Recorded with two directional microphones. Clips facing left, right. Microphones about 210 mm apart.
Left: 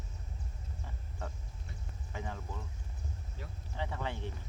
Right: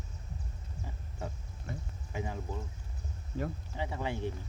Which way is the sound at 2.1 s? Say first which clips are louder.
Right 5 dB; 15° right (ahead or behind).